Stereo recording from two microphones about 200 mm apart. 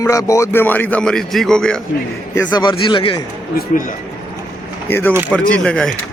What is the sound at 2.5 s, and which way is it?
Speech, 20° left (ahead or behind).